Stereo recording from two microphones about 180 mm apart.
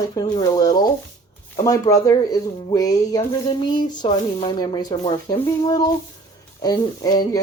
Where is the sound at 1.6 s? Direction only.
20° left (ahead or behind).